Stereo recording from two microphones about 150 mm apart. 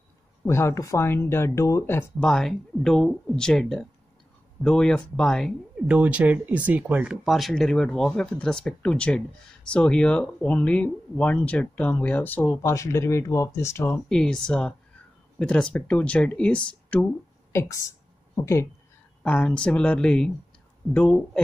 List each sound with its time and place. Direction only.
0.5 s speech: 20° left (ahead or behind); by 5.5 s 5° left (ahead or behind)
5.9 s speech: 10° right (ahead or behind); by 14.0 s 15° left (ahead or behind)
14.0 s speech: 5° left (ahead or behind)
17.5 s speech: 20° left (ahead or behind)
19.2 s speech: 10° left (ahead or behind)